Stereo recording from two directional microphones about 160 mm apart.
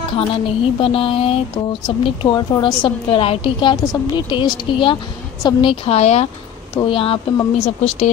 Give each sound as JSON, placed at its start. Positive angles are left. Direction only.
{"t": 0.3, "sound": "speech", "side_deg": 35}
{"t": 6.7, "sound": "speech", "side_deg": 30}